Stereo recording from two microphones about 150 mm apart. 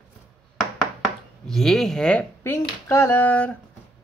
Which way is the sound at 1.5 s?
5° left (ahead or behind).